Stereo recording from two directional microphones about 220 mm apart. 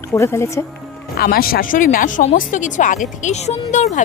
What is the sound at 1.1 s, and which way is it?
Speech, 45° left (ahead or behind).